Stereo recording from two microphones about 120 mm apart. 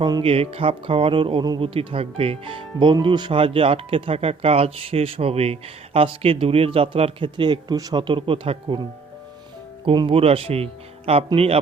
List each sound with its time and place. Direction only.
0.2 s speech: 50° right (ahead or behind)
9.8 s a man's voice: 45° right (ahead or behind)